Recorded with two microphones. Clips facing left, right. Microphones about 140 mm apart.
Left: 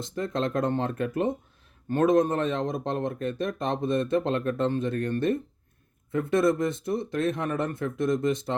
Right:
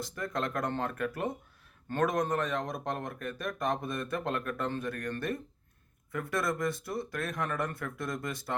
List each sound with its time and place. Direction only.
0.0 s speech: 25° left (ahead or behind)